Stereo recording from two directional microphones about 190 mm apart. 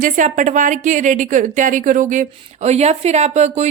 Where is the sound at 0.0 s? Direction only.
40° right (ahead or behind).